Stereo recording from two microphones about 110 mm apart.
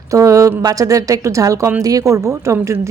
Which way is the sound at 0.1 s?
30° right (ahead or behind).